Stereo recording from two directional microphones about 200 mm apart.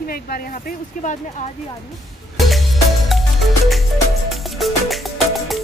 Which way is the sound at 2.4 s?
Centre (ahead or behind).